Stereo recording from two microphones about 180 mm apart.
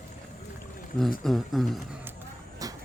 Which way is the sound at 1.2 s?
Centre (ahead or behind).